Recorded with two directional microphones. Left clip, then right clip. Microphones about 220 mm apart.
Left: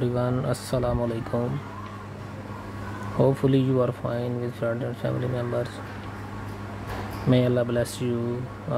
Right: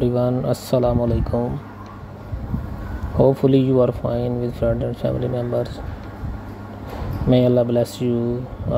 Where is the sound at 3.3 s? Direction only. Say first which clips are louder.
Right 7 dB; 10° right (ahead or behind).